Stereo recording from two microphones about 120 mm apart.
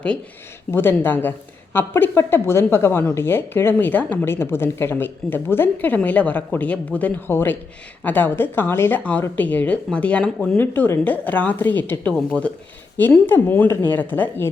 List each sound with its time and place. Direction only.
0.7 s a woman's voice: 20° left (ahead or behind)
10.6 s a woman's voice: 20° left (ahead or behind)